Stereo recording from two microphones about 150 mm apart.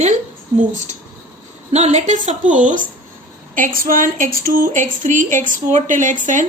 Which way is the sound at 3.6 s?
65° right (ahead or behind).